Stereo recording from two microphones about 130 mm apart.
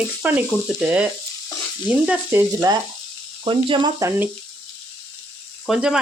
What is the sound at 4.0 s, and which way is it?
Speech, 20° right (ahead or behind).